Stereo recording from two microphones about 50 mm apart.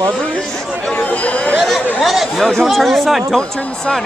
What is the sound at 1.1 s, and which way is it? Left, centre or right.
Speech, left.